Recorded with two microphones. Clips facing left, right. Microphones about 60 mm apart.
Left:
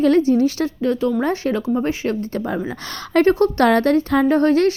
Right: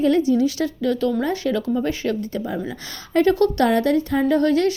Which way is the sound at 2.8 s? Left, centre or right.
Left.